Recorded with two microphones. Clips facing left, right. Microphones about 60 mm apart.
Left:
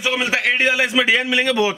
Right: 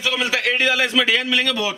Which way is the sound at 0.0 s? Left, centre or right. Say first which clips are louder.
Left 2 dB; left.